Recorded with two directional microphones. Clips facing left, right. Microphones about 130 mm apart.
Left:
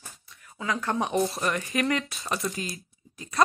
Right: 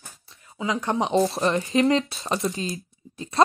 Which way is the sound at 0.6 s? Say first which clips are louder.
Right 3 dB; 20° right (ahead or behind).